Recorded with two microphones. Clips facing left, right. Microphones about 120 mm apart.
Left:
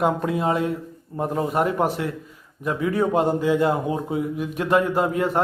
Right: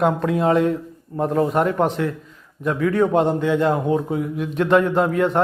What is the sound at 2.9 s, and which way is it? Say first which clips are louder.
Speech: right 2 dB; 5° left (ahead or behind).